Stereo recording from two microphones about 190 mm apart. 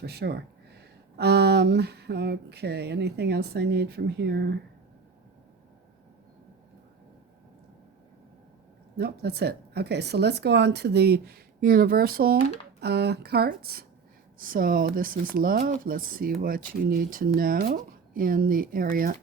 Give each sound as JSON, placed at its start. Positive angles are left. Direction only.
{"t": 0.0, "sound": "speech", "side_deg": -60}
{"t": 9.0, "sound": "speech", "side_deg": -60}